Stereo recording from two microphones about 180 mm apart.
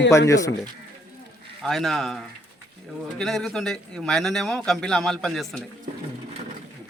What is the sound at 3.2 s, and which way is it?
Speech, centre (ahead or behind).